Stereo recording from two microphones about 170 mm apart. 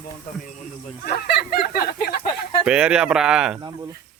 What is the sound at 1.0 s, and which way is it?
Speech, 70° left (ahead or behind).